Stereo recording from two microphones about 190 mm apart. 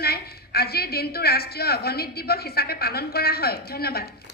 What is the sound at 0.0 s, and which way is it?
A woman's voice, 55° left (ahead or behind).